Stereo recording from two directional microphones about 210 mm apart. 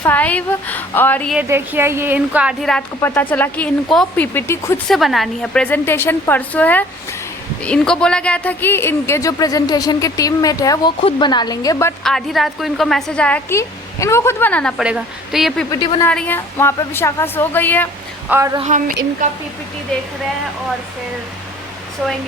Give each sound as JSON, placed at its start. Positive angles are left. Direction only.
{"t": 0.0, "sound": "speech", "side_deg": 10}
{"t": 1.4, "sound": "a woman's voice", "side_deg": -10}
{"t": 4.9, "sound": "speech", "side_deg": 0}
{"t": 12.0, "sound": "a woman's voice", "side_deg": 0}
{"t": 15.7, "sound": "a woman's voice", "side_deg": 20}
{"t": 16.0, "sound": "speech", "side_deg": 10}
{"t": 18.3, "sound": "speech", "side_deg": -15}
{"t": 18.6, "sound": "speech", "side_deg": -35}